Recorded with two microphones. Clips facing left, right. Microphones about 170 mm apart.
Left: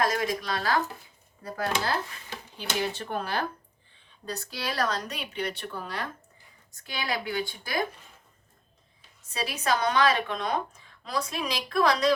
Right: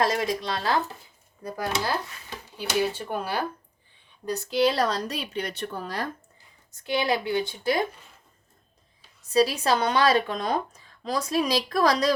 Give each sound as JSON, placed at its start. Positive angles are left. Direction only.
{"t": 0.0, "sound": "speech", "side_deg": -25}
{"t": 1.5, "sound": "speech", "side_deg": -15}
{"t": 2.9, "sound": "speech", "side_deg": -10}
{"t": 4.4, "sound": "a woman's voice", "side_deg": -20}
{"t": 7.0, "sound": "speech", "side_deg": -20}
{"t": 9.3, "sound": "a woman's voice", "side_deg": -35}